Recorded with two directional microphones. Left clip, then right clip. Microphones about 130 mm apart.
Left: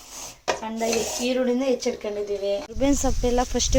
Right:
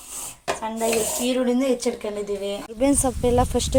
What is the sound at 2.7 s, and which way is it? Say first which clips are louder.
Speech: right 2 dB; 10° right (ahead or behind).